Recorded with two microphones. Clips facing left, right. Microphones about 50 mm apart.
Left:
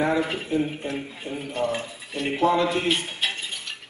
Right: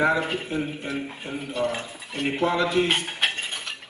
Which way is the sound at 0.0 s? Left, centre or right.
Right.